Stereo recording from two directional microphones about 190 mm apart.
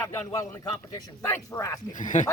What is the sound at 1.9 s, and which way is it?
Speech, 40° left (ahead or behind).